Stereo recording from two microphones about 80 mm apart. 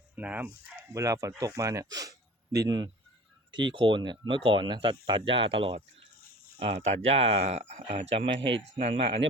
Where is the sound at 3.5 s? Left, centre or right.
Right.